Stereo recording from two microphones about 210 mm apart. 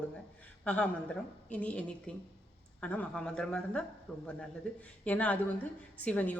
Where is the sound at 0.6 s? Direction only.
5° left (ahead or behind).